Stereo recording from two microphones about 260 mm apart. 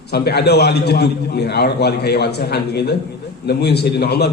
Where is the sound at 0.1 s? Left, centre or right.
Left.